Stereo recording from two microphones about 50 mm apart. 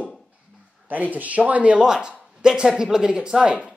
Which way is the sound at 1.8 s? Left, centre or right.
Centre.